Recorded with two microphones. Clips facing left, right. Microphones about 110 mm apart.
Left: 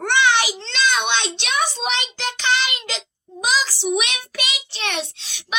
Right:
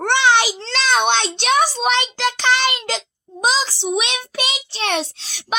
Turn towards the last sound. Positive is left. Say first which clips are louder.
# right 6 dB
turn(degrees=-40)  # may be behind; listen again after turning